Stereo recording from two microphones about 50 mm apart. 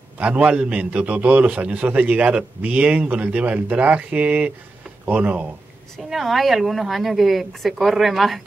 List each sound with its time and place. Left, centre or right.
0.2 s a man's voice: right
5.9 s a woman's voice: centre